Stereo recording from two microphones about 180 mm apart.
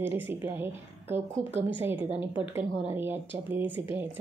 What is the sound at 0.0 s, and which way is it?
A woman's voice, 10° right (ahead or behind).